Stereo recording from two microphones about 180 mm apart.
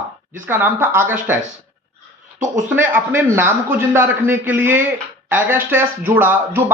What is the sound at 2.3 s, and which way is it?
Speech, 45° right (ahead or behind).